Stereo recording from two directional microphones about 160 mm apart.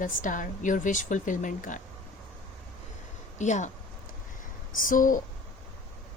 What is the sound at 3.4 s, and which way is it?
Speech, 50° left (ahead or behind).